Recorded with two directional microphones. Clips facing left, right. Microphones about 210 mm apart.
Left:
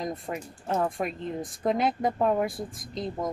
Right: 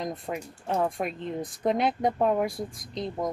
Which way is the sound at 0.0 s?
Centre (ahead or behind).